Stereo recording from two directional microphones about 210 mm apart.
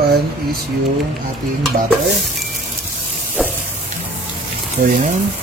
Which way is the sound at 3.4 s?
Centre (ahead or behind).